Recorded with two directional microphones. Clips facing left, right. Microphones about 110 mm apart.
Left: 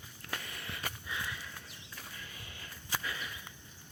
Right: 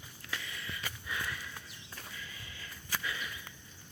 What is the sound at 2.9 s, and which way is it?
Walk, 35° left (ahead or behind).